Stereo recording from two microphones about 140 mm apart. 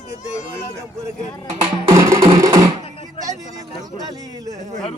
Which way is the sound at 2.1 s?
40° right (ahead or behind).